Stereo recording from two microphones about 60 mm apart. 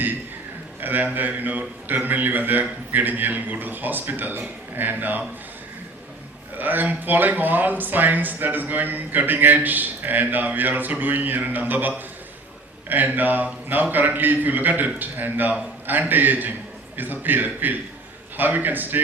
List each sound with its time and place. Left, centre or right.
0.8 s speech: right
6.6 s speech: right